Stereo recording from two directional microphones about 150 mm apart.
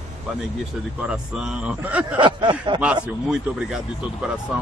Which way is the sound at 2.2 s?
30° right (ahead or behind).